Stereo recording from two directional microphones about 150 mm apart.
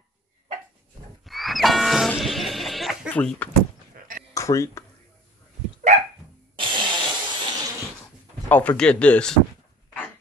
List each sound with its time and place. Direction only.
1.2 s music: centre (ahead or behind)
3.1 s speech: 10° left (ahead or behind)
4.3 s speech: 20° left (ahead or behind)
6.5 s a sound: 35° right (ahead or behind)
8.5 s speech: 10° left (ahead or behind)